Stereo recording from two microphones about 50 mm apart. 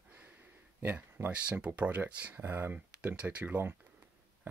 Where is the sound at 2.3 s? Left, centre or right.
Right.